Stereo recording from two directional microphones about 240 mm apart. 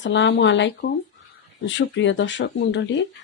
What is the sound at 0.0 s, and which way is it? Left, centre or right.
Speech, left.